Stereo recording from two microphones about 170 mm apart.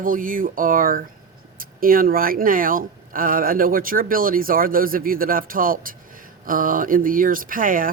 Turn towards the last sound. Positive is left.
turn(degrees=-55)  # may be behind; listen again after turning